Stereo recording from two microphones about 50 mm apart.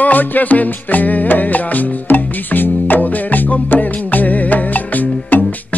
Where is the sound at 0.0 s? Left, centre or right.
Left.